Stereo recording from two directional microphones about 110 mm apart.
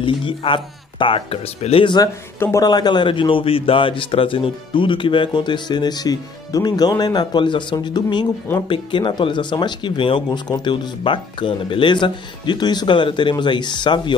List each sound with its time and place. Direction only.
0.0 s a man's voice: 50° left (ahead or behind)
2.3 s speech: 20° left (ahead or behind)
2.6 s a man's voice: 40° left (ahead or behind)